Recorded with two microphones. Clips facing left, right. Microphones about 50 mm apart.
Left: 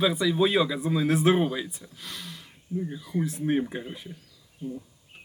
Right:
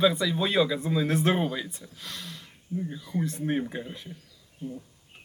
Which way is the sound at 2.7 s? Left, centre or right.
Left.